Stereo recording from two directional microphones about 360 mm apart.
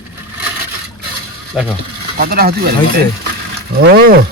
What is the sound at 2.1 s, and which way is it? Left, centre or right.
Speech, right.